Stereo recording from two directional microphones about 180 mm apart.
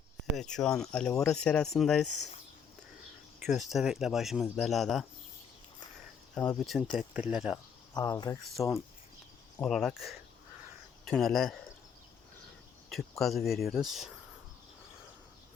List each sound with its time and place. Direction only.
0.3 s speech: 5° left (ahead or behind)
3.5 s speech: centre (ahead or behind)
6.3 s speech: 5° left (ahead or behind)
7.9 s speech: 20° left (ahead or behind)
9.6 s speech: centre (ahead or behind)
12.9 s speech: centre (ahead or behind)